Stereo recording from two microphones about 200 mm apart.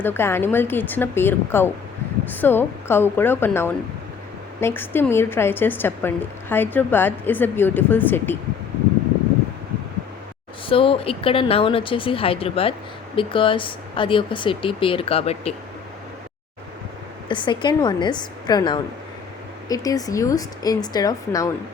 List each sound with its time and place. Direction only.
0.0 s a woman's voice: 10° left (ahead or behind)
10.7 s speech: 25° left (ahead or behind)
17.2 s a woman's voice: 25° left (ahead or behind)